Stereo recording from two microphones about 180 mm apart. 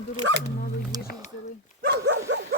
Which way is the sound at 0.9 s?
20° right (ahead or behind).